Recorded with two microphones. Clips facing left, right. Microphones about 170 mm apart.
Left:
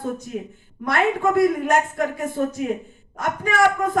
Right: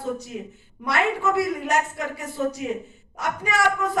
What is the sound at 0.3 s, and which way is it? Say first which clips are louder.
A man's voice: left 4 dB; 50° left (ahead or behind).